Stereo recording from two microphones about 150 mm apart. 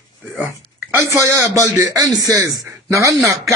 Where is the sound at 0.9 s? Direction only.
20° right (ahead or behind).